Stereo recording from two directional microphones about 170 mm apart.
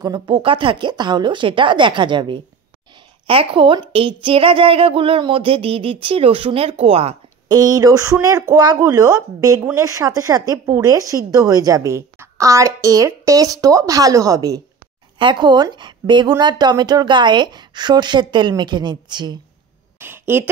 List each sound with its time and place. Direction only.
0.0 s a woman's voice: 25° right (ahead or behind)
7.4 s speech: 20° right (ahead or behind)
20.0 s a sound: 10° right (ahead or behind)